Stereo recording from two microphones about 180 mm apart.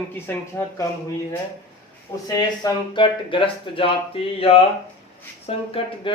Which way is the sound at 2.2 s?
20° left (ahead or behind).